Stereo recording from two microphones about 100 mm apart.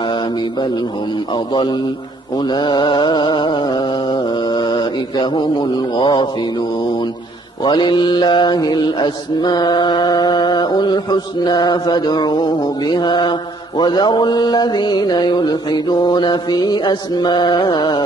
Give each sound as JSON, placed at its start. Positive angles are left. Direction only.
{"t": 1.3, "sound": "mantra", "side_deg": 50}
{"t": 7.6, "sound": "mantra", "side_deg": 50}